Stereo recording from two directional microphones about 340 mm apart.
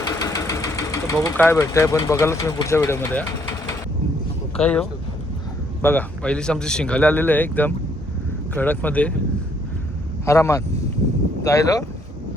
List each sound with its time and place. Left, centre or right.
0.0 s speech: centre
4.5 s a man's voice: centre
10.2 s speech: centre